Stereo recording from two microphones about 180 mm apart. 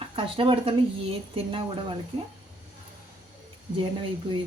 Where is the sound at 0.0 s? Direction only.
30° right (ahead or behind).